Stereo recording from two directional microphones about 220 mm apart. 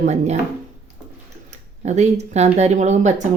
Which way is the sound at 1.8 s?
30° right (ahead or behind).